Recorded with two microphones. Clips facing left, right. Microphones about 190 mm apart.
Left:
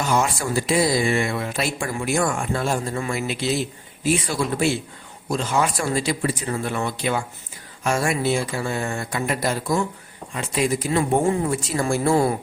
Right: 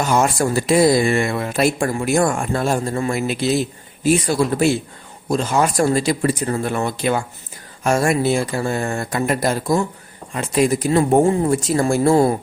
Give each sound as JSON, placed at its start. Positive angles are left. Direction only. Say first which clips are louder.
{"t": 0.0, "sound": "speech", "louder": "right 5 dB", "side_deg": -45}